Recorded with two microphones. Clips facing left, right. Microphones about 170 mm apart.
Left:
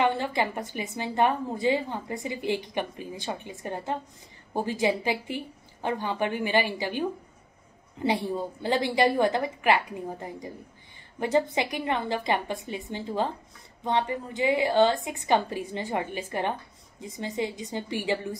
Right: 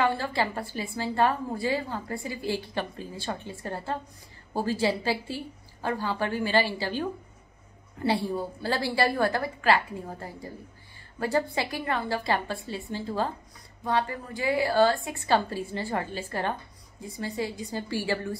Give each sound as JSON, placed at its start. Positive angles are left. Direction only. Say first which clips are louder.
{"t": 0.0, "sound": "a woman's voice", "louder": "left 1 dB", "side_deg": 20}